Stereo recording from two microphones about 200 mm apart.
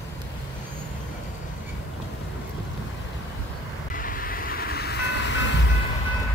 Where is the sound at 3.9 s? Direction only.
45° left (ahead or behind); by 5.7 s 65° left (ahead or behind).